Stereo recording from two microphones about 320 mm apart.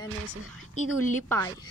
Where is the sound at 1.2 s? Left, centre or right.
Centre.